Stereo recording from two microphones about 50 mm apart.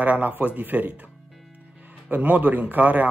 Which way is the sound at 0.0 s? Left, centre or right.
Right.